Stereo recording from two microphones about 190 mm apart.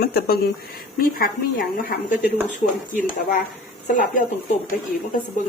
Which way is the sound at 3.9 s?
45° left (ahead or behind).